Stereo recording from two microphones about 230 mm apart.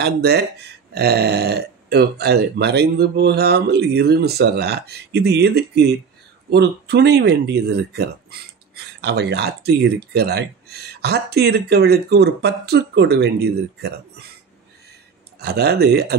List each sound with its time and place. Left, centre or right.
0.0 s speech: right
15.3 s speech: right